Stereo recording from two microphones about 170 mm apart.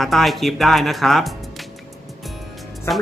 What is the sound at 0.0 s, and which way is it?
Speech, centre (ahead or behind).